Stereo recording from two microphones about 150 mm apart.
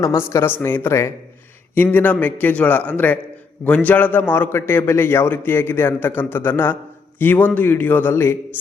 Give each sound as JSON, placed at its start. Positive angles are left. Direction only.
{"t": 0.0, "sound": "a man's voice", "side_deg": 20}